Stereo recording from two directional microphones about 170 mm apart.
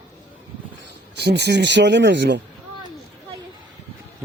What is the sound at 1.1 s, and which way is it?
Speech, 80° right.